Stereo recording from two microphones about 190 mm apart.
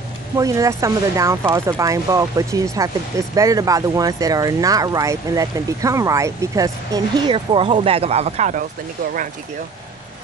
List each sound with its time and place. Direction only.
0.4 s speech: 15° right (ahead or behind); by 8.6 s 40° right (ahead or behind)